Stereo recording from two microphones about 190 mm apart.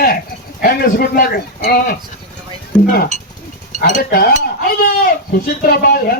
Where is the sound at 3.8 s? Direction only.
45° left (ahead or behind).